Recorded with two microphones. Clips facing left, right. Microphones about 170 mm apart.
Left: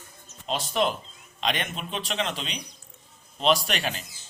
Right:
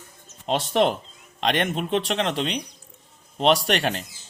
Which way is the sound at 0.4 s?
65° right (ahead or behind).